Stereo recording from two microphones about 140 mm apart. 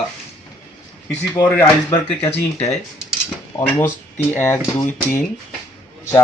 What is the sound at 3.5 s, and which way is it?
Speech, 25° left (ahead or behind).